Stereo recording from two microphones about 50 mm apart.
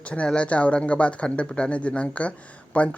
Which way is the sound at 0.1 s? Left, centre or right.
Left.